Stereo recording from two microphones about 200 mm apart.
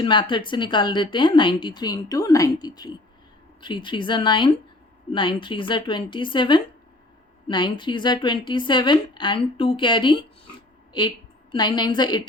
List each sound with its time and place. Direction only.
0.0 s speech: 25° left (ahead or behind)
11.5 s speech: 20° left (ahead or behind)